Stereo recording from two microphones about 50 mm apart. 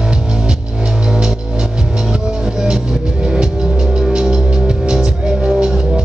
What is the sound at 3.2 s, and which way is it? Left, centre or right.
Music, centre.